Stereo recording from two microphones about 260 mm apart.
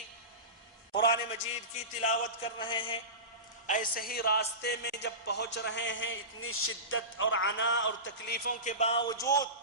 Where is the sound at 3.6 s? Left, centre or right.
Left.